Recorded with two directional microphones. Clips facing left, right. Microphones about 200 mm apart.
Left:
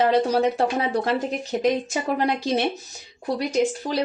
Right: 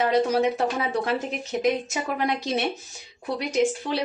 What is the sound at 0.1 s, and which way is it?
Speech, 30° left (ahead or behind).